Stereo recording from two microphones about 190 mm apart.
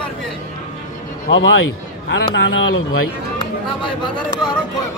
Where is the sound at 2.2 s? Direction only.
70° left (ahead or behind); by 3.0 s 90° left.